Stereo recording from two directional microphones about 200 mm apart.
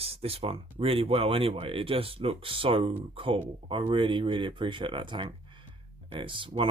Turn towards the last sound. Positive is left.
turn(degrees=-25)  # may be behind; listen again after turning